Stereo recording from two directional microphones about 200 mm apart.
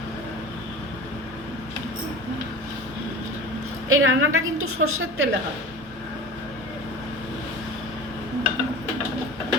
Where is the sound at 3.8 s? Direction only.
90° right.